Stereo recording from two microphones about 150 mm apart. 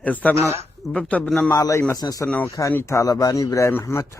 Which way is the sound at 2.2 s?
10° left (ahead or behind).